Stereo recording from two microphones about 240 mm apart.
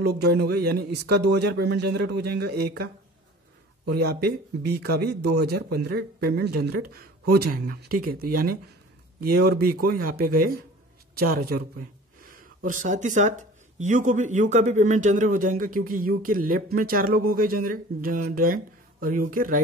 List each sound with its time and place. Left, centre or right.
0.0 s speech: right
3.9 s speech: right